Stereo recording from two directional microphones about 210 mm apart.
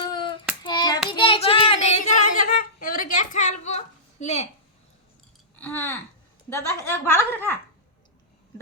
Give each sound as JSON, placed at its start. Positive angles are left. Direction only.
{"t": 0.0, "sound": "hands", "side_deg": 20}
{"t": 0.6, "sound": "child singing", "side_deg": 20}
{"t": 5.5, "sound": "a sound", "side_deg": 10}
{"t": 6.5, "sound": "a woman's voice", "side_deg": 15}